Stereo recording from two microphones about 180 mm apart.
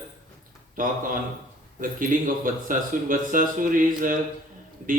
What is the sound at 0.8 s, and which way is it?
A man's voice, 50° right (ahead or behind).